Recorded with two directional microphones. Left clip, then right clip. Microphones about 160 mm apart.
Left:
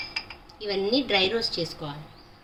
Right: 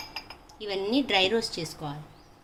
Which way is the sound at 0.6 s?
55° right (ahead or behind).